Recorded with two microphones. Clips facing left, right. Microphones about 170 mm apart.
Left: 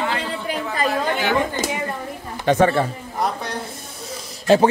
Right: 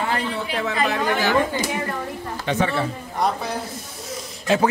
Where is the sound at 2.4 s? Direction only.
45° left (ahead or behind).